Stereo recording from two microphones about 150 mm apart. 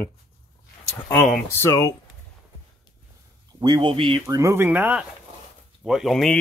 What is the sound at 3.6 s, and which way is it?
Speech, 30° right (ahead or behind).